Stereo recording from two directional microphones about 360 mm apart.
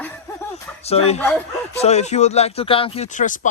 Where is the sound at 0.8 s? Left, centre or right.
Centre.